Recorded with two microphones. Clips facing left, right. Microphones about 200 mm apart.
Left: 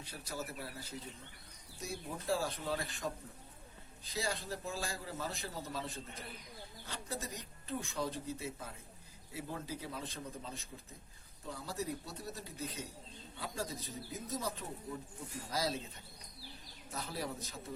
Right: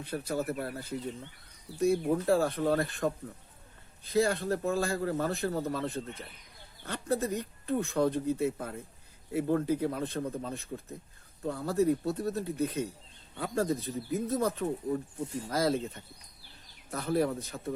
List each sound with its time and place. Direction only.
0.0 s speech: 55° right (ahead or behind)
16.9 s speech: 55° right (ahead or behind)